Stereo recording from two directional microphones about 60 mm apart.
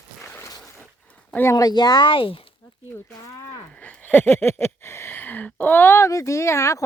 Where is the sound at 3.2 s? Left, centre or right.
Left.